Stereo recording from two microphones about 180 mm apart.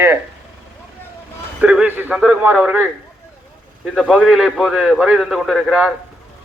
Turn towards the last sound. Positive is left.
turn(degrees=-5)  # may be behind; listen again after turning